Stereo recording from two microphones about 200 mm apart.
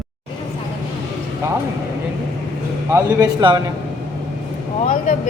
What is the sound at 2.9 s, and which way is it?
Speech, 15° right (ahead or behind).